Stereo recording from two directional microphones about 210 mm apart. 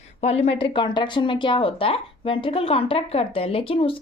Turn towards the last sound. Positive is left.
turn(degrees=25)  # may be behind; listen again after turning